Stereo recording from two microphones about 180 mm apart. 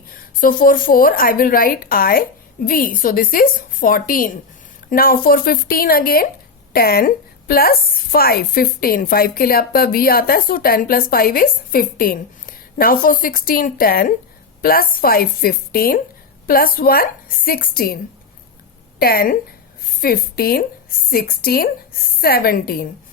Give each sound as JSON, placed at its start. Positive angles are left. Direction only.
{"t": 0.1, "sound": "a woman's voice", "side_deg": 50}
{"t": 18.9, "sound": "a woman's voice", "side_deg": 55}